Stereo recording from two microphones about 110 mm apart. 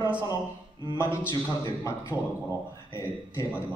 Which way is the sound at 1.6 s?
25° left (ahead or behind).